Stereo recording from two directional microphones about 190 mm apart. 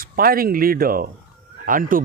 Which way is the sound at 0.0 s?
50° right (ahead or behind).